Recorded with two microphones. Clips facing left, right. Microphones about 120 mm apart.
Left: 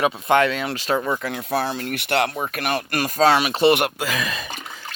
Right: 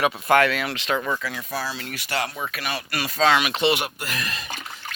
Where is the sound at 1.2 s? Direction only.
60° left (ahead or behind); by 3.7 s 35° left (ahead or behind).